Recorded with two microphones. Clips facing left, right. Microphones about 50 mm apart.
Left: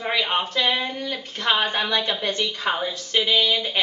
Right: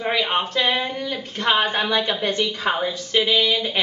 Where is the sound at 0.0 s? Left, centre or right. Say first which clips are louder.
Right 2 dB; centre.